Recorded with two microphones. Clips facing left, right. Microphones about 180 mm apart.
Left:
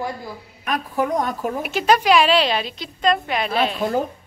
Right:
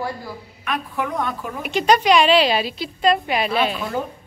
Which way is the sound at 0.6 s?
40° left (ahead or behind).